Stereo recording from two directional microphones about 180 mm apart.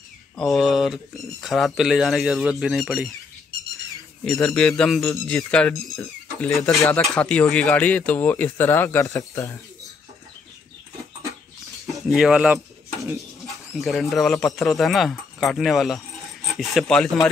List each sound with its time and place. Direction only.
0.4 s speech: centre (ahead or behind)
4.2 s speech: 5° left (ahead or behind)
11.8 s speech: centre (ahead or behind)
12.5 s mechanisms: 20° right (ahead or behind)
13.4 s speech: centre (ahead or behind)